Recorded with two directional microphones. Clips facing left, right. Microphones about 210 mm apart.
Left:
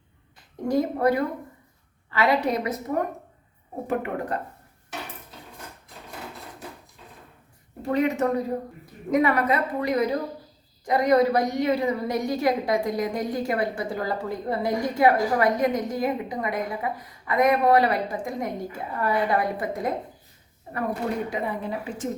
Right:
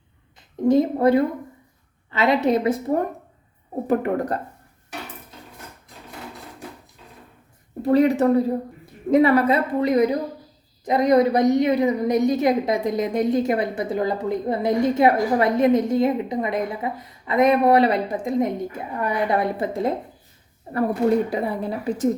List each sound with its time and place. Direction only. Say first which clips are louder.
0.7 s a woman's voice: right 5 dB; 25° right (ahead or behind)
3.8 s a woman's voice: right 6 dB; 40° right (ahead or behind)
7.8 s a woman's voice: right 6 dB; 35° right (ahead or behind)
21.2 s a woman's voice: right 4 dB; 35° right (ahead or behind)